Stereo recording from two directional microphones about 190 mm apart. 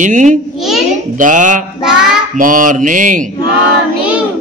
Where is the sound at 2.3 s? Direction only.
45° right (ahead or behind).